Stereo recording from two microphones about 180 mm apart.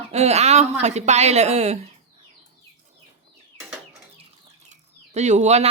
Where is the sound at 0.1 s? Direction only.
35° right (ahead or behind).